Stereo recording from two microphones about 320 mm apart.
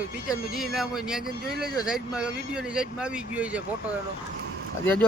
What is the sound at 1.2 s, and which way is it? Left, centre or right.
Speech, right.